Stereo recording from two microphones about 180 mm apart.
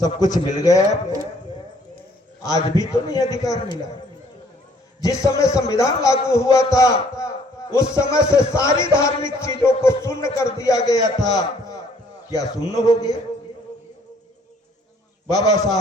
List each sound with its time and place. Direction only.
0.0 s a man's voice: 20° left (ahead or behind)
2.7 s a man's voice: 20° left (ahead or behind)
5.0 s music: 15° left (ahead or behind)
12.3 s a man's voice: 20° left (ahead or behind)
15.4 s a man's voice: 20° left (ahead or behind)